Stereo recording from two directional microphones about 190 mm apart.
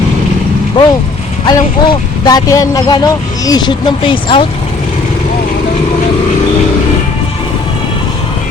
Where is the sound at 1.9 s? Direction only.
20° left (ahead or behind).